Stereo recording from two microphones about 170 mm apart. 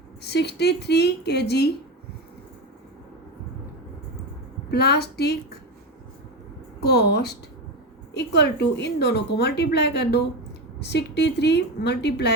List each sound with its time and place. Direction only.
0.2 s speech: 75° left (ahead or behind)
4.7 s speech: 75° left (ahead or behind)
6.8 s speech: 70° left (ahead or behind)
8.1 s a woman's voice: 85° left